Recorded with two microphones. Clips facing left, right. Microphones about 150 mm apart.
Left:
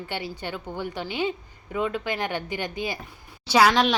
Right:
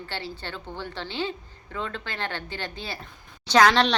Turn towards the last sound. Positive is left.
turn(degrees=5)  # may be behind; listen again after turning